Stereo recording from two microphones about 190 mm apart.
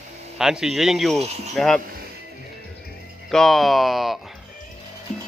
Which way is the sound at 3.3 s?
Centre (ahead or behind).